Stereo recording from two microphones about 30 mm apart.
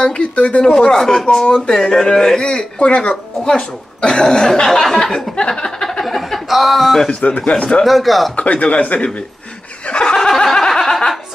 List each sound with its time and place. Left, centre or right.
0.0 s speech: left
0.4 s speech: left
0.7 s speech: centre
2.8 s speech: left; by 5.2 s centre
5.5 s a sound: centre
6.0 s chuckle: centre
6.4 s speech: centre
7.1 s a man's voice: left
7.4 s speech: left
7.8 s speech: centre
8.5 s a man's voice: left
10.0 s a sound: left
10.3 s a sound: centre